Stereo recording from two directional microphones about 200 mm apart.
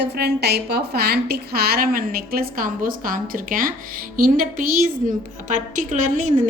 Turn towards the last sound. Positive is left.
turn(degrees=-40)  # may be behind; listen again after turning